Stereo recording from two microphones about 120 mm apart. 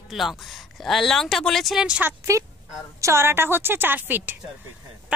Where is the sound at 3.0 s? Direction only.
25° right (ahead or behind).